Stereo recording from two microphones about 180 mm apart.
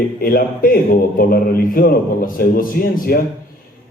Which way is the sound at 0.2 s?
55° left (ahead or behind).